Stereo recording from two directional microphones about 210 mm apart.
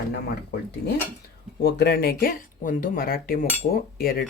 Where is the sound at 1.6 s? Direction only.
50° left (ahead or behind).